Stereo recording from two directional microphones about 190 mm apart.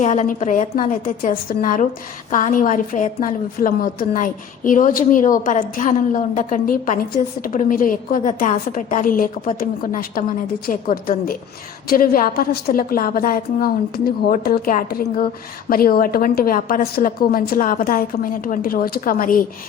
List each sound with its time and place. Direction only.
0.0 s a woman's voice: 40° left (ahead or behind)